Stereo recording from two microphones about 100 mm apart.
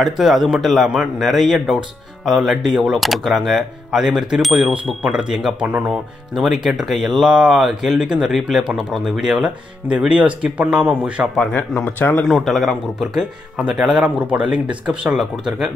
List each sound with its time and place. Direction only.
0.0 s speech: centre (ahead or behind)
6.3 s speech: centre (ahead or behind)
11.3 s speech: 15° left (ahead or behind)
12.3 s speech: centre (ahead or behind)